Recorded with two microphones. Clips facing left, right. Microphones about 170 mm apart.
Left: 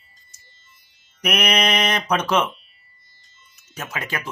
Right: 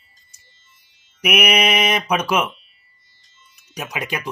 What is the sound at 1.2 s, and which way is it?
Speech, 10° right (ahead or behind).